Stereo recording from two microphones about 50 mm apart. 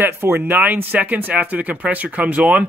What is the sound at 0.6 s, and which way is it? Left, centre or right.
Speech, right.